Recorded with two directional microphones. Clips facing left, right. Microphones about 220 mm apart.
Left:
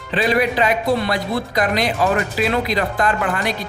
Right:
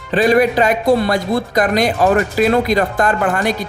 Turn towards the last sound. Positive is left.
turn(degrees=-45)  # may be behind; listen again after turning